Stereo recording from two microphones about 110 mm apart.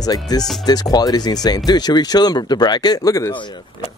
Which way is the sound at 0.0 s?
35° left (ahead or behind).